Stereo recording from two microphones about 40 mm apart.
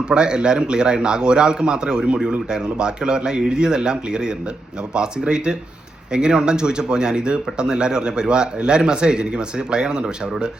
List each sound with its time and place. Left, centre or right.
0.0 s speech: right